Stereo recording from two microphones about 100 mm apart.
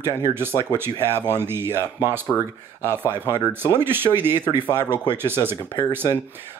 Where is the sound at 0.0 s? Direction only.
25° right (ahead or behind).